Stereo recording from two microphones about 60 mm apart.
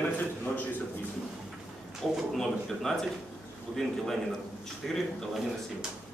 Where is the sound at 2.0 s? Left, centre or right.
Centre.